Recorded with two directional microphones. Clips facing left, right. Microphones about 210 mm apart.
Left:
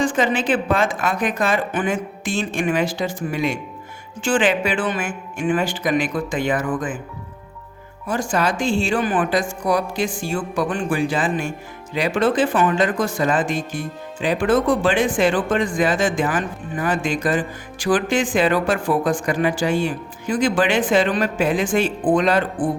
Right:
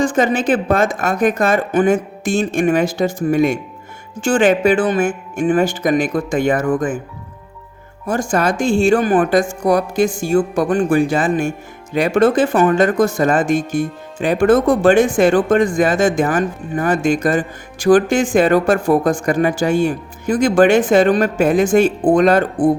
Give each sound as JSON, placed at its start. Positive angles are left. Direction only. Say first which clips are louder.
{"t": 0.0, "sound": "speech", "louder": "right 4 dB", "side_deg": -40}
{"t": 8.0, "sound": "speech", "louder": "right 4 dB", "side_deg": -45}